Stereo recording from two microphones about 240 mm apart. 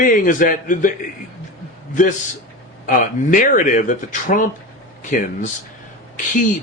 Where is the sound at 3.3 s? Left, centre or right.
Left.